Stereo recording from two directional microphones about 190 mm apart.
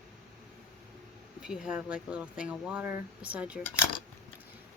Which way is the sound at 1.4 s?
5° right (ahead or behind).